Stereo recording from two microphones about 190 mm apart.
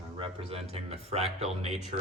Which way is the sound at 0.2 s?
30° right (ahead or behind).